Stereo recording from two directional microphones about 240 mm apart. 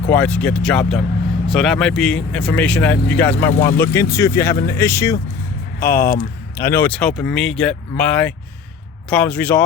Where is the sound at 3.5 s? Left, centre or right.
Left.